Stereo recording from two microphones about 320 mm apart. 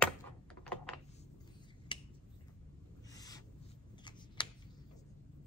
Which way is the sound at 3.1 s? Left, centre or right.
Centre.